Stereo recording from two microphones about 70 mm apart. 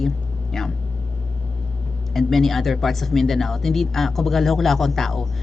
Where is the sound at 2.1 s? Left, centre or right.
Centre.